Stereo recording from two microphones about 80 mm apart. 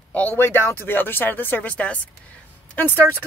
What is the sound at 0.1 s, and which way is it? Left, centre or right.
Speech, left.